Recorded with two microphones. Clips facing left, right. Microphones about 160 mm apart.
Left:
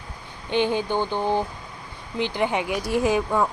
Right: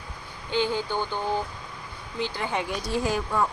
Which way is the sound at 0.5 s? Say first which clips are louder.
Left 4 dB; 20° left (ahead or behind).